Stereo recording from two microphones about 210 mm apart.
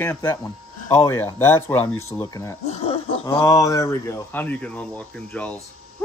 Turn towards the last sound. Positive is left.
turn(degrees=5)  # may be behind; listen again after turning